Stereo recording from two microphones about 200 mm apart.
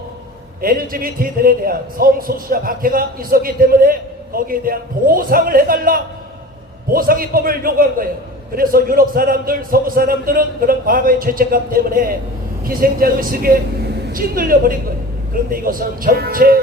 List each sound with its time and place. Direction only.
0.6 s a man's voice: 45° right (ahead or behind)